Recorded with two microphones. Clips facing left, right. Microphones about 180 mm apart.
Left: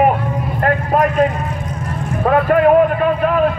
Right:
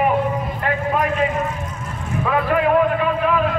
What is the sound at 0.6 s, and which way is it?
Vehicle, 50° left (ahead or behind).